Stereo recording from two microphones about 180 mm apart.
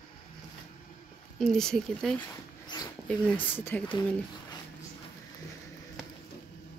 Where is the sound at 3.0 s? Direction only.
10° left (ahead or behind).